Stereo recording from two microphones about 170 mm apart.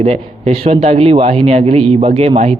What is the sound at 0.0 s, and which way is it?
A man's voice, 40° right (ahead or behind).